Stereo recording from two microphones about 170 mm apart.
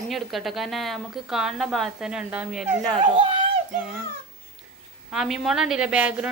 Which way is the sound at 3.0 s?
30° right (ahead or behind).